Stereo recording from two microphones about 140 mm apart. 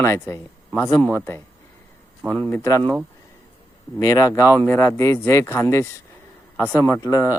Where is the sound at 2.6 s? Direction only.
20° left (ahead or behind).